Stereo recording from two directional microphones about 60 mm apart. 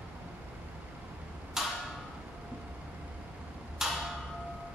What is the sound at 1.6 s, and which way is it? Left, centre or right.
Tick-tock, centre.